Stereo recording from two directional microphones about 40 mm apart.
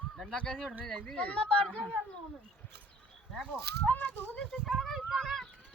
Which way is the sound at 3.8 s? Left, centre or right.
Left.